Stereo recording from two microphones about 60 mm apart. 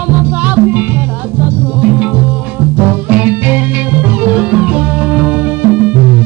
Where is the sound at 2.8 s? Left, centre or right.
Right.